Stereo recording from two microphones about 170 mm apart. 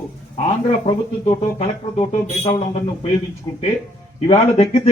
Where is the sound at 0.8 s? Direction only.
35° left (ahead or behind).